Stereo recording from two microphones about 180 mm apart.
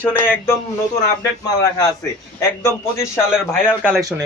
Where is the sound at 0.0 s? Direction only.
10° left (ahead or behind).